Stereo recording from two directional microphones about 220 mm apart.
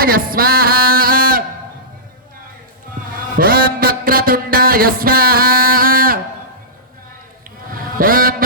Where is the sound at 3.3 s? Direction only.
40° right (ahead or behind).